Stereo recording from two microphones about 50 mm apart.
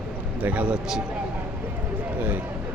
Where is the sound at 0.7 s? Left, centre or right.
Centre.